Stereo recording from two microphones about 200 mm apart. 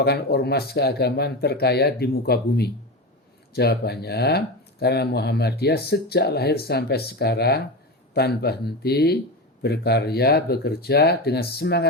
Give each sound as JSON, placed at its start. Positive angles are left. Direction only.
{"t": 0.0, "sound": "speech", "side_deg": 55}